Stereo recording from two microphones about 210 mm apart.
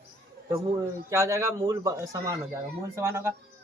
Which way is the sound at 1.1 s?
15° right (ahead or behind).